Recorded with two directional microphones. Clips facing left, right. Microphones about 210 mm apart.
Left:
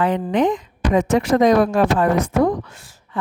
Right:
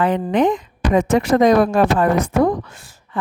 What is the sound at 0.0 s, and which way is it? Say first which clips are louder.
A woman's voice: right 1 dB; 55° right (ahead or behind).